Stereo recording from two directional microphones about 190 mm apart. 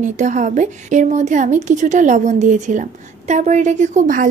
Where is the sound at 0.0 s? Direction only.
40° right (ahead or behind).